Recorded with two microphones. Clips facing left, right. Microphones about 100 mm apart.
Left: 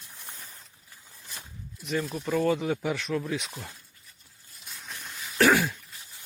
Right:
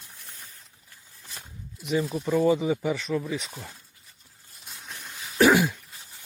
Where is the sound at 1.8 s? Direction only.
10° right (ahead or behind).